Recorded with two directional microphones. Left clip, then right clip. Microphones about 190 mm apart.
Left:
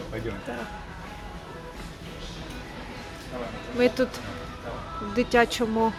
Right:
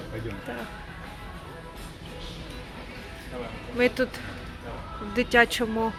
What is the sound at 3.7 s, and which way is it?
Speech, 5° left (ahead or behind).